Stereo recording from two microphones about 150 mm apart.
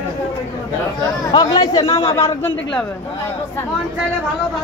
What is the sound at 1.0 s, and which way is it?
Speech, 25° left (ahead or behind).